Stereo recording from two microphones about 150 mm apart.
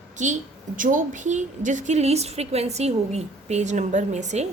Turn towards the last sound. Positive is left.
turn(degrees=-50)  # may be behind; listen again after turning